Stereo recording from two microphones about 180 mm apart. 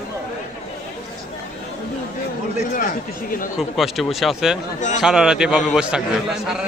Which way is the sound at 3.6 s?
Centre (ahead or behind).